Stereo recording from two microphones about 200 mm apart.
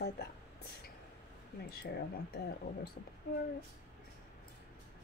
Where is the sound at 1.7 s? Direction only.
50° left (ahead or behind).